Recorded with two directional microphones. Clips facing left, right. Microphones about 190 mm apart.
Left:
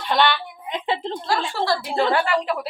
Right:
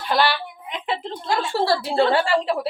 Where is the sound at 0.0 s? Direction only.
5° right (ahead or behind).